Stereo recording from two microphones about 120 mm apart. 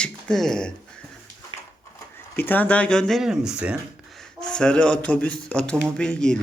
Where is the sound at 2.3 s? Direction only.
15° left (ahead or behind); by 3.8 s 10° right (ahead or behind).